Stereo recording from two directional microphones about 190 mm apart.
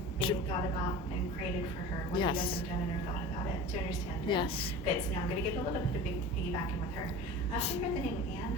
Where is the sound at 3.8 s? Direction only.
25° left (ahead or behind).